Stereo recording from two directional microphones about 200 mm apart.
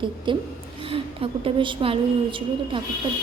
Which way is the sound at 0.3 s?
25° right (ahead or behind).